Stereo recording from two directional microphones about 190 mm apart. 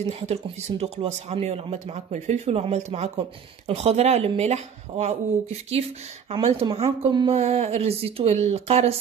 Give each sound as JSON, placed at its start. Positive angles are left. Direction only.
{"t": 0.3, "sound": "speech", "side_deg": -35}